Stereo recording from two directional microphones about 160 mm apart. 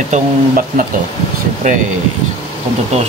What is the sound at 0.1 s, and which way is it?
Speech, 60° right (ahead or behind).